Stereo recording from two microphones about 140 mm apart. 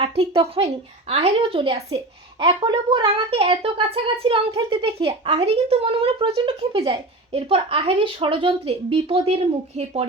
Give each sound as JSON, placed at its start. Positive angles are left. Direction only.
{"t": 0.0, "sound": "a woman's voice", "side_deg": -40}